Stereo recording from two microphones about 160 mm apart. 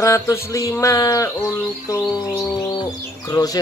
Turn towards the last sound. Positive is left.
turn(degrees=20)  # may be behind; listen again after turning